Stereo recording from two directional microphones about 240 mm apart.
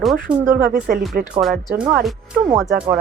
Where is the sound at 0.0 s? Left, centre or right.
Centre.